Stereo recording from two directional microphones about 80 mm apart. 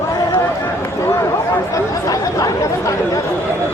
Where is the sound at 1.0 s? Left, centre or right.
Left.